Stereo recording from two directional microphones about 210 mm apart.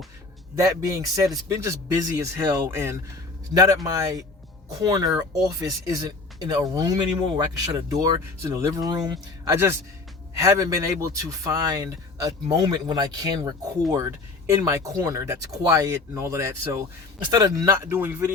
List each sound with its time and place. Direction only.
0.5 s speech: 15° right (ahead or behind)